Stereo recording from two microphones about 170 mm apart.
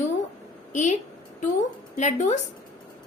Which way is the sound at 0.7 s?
45° left (ahead or behind).